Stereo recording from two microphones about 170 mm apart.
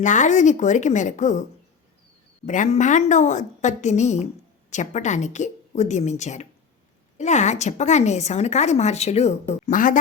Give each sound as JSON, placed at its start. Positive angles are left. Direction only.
{"t": 0.0, "sound": "a woman's voice", "side_deg": 45}
{"t": 2.5, "sound": "a woman's voice", "side_deg": 45}